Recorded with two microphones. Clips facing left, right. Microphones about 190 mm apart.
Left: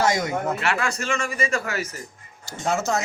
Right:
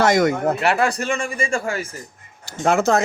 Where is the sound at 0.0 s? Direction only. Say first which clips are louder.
Right 6 dB; 70° right (ahead or behind).